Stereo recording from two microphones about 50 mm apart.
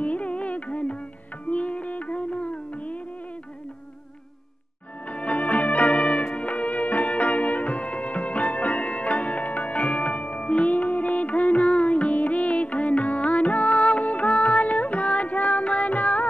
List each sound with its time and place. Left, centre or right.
0.0 s music: left
5.1 s music: left